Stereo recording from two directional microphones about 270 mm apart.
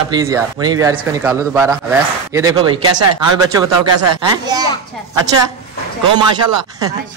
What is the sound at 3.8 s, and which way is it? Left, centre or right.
Speech, right.